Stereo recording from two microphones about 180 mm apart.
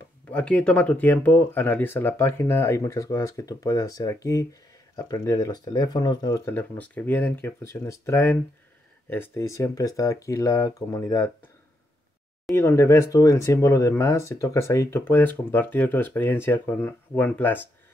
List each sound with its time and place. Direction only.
0.3 s speech: 5° left (ahead or behind)
12.5 s speech: 15° left (ahead or behind)